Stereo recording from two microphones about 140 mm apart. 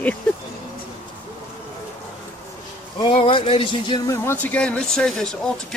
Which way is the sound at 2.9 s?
40° left (ahead or behind).